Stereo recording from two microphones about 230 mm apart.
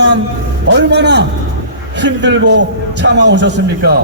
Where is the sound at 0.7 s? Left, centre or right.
Right.